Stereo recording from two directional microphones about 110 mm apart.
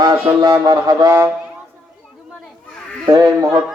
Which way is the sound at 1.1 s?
20° right (ahead or behind).